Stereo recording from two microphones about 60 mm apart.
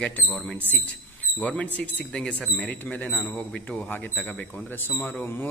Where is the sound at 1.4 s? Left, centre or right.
Left.